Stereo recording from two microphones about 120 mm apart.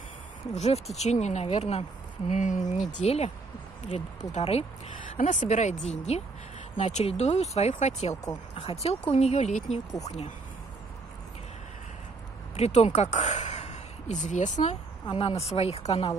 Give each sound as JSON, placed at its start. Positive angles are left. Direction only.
{"t": 0.6, "sound": "speech", "side_deg": 65}
{"t": 8.5, "sound": "speech", "side_deg": 55}
{"t": 9.1, "sound": "speech", "side_deg": 65}
{"t": 10.0, "sound": "speech", "side_deg": 65}
{"t": 12.5, "sound": "speech", "side_deg": 60}
{"t": 15.0, "sound": "speech", "side_deg": 50}